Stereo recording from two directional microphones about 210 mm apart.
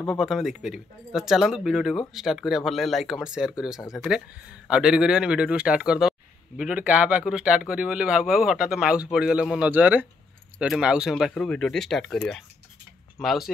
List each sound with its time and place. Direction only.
0.0 s speech: centre (ahead or behind)